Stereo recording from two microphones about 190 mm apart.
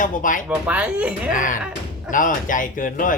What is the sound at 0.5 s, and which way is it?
Speech, 5° right (ahead or behind).